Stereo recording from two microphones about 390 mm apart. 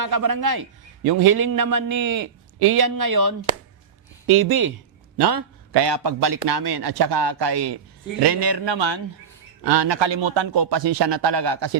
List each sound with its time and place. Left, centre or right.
0.0 s a man's voice: right
2.6 s speech: right
5.1 s a man's voice: right